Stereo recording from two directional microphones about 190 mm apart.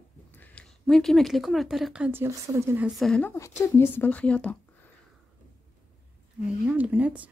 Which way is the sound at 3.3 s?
15° left (ahead or behind).